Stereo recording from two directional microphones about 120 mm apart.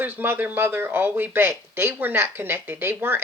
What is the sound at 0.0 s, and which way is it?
Speech, 15° right (ahead or behind).